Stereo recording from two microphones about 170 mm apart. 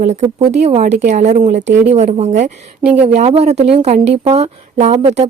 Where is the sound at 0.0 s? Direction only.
40° right (ahead or behind).